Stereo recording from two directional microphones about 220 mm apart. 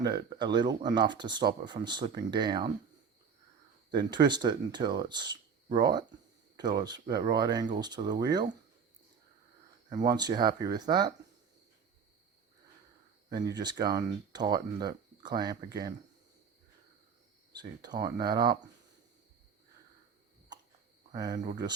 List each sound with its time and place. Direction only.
0.3 s speech: 20° right (ahead or behind)
3.9 s speech: 20° right (ahead or behind)
10.0 s speech: 20° right (ahead or behind)
13.6 s speech: 20° right (ahead or behind)
17.6 s speech: 20° right (ahead or behind)
21.1 s speech: 15° right (ahead or behind)